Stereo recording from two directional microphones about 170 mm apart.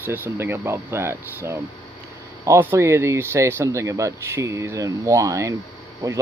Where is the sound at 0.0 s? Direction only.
10° right (ahead or behind).